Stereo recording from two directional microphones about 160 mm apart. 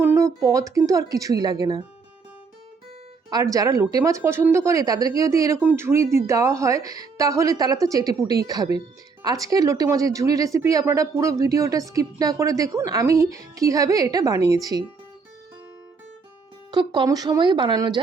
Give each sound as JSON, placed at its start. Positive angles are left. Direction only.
{"t": 0.0, "sound": "a sound", "side_deg": -15}
{"t": 0.4, "sound": "speech", "side_deg": -20}
{"t": 3.2, "sound": "speech", "side_deg": -25}
{"t": 16.7, "sound": "speech", "side_deg": -25}